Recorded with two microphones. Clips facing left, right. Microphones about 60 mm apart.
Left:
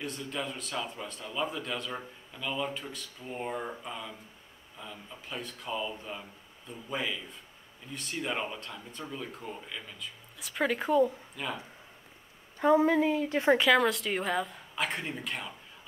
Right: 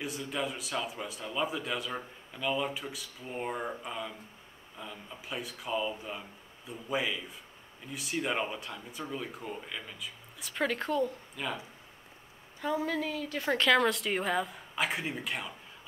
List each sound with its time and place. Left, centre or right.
0.0 s a man's voice: centre
12.5 s a woman's voice: left
13.6 s a man's voice: centre